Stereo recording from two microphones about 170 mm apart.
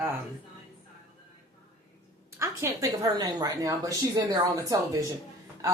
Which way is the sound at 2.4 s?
20° right (ahead or behind).